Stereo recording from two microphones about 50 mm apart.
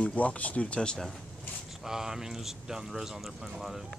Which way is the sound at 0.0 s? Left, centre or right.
Left.